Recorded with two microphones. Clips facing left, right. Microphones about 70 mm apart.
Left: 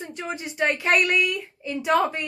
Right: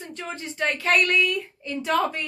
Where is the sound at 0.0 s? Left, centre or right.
Centre.